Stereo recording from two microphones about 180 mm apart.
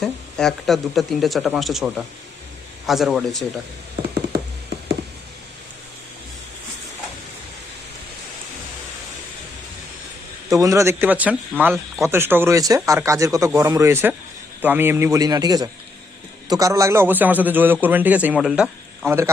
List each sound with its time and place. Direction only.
0.0 s speech: centre (ahead or behind)
10.5 s a man's voice: 15° right (ahead or behind)